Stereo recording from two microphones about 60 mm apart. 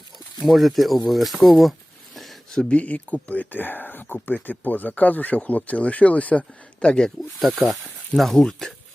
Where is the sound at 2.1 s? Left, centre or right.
Centre.